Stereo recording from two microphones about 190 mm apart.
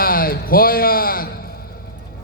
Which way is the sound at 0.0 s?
50° left (ahead or behind).